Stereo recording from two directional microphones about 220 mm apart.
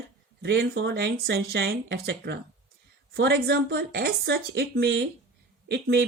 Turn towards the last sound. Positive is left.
turn(degrees=-50)  # may be behind; listen again after turning